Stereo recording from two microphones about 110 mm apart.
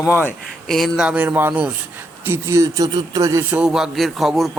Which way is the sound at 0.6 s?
5° left (ahead or behind).